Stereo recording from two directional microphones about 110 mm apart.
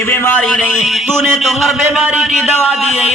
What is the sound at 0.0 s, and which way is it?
Speech, 20° left (ahead or behind).